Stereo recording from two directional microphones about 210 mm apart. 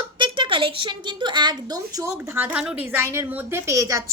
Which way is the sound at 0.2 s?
25° right (ahead or behind).